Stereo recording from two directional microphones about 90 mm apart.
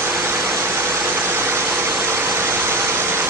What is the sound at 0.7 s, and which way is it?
Vehicle, 25° right (ahead or behind).